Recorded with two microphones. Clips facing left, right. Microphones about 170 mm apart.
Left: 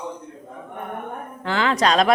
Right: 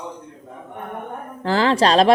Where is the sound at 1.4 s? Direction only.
35° right (ahead or behind).